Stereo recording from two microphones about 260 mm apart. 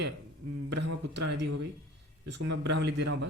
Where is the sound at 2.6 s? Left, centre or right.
Right.